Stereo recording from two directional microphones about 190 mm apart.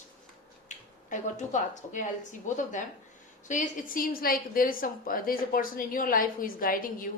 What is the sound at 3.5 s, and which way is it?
A woman's voice, 45° left (ahead or behind).